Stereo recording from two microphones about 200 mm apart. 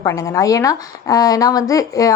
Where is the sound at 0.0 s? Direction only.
15° left (ahead or behind).